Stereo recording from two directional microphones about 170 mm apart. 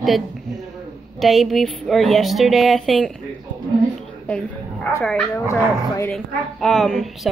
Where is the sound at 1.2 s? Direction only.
Centre (ahead or behind).